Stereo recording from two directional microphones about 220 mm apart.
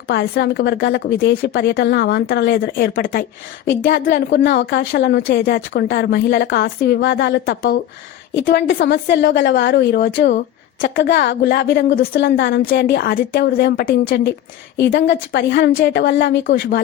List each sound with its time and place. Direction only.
0.1 s a woman's voice: 50° left (ahead or behind)